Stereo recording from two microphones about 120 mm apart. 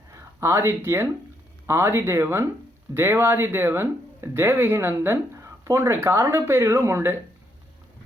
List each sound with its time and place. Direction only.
0.1 s speech: 25° right (ahead or behind)